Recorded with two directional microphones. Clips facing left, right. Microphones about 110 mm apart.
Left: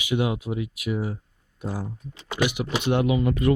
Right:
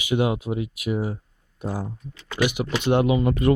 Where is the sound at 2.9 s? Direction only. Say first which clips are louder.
Right 3 dB; 30° right (ahead or behind).